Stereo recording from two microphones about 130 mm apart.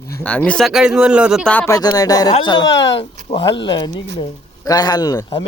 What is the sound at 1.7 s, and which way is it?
Speech, 30° left (ahead or behind).